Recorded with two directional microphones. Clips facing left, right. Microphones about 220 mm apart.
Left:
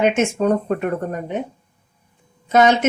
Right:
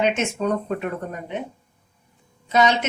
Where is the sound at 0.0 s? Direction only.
50° left (ahead or behind).